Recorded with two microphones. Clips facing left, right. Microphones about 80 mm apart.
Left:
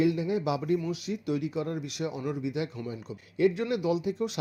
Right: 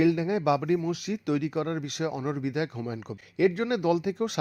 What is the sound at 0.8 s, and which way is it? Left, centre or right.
Speech, right.